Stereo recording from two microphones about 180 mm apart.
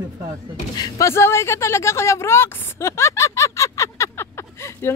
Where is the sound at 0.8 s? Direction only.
15° left (ahead or behind).